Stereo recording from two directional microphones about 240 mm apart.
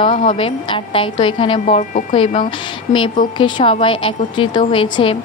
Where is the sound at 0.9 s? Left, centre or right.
Left.